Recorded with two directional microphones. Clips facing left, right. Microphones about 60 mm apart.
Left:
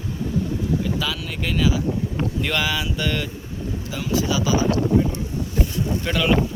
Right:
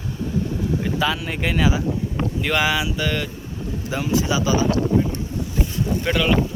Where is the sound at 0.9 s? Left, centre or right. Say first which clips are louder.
Right 4 dB; right; by 3.2 s centre.